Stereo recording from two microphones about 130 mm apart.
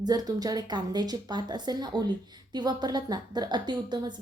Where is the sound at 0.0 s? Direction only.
30° right (ahead or behind).